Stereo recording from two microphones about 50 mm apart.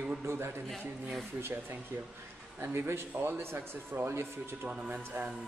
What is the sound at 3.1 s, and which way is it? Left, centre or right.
Speech, right.